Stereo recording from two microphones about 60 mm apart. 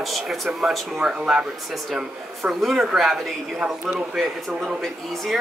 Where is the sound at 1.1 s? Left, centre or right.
Centre.